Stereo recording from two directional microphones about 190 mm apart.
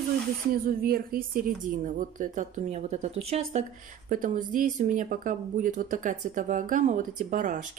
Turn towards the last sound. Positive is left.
turn(degrees=-40)  # may be behind; listen again after turning